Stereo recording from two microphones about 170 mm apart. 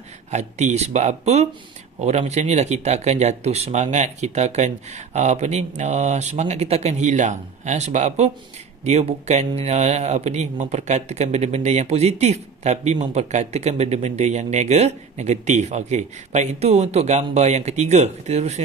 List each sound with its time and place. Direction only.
0.3 s speech: 45° right (ahead or behind)